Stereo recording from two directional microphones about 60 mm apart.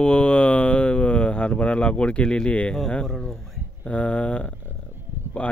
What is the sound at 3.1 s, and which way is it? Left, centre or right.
Speech, centre.